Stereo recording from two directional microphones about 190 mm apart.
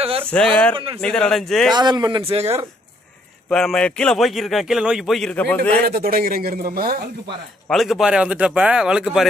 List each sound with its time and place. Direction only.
0.3 s a man's voice: 5° left (ahead or behind)
1.7 s speech: 20° right (ahead or behind)
3.4 s a man's voice: 5° left (ahead or behind)
5.8 s speech: 55° right (ahead or behind)
7.7 s a man's voice: centre (ahead or behind)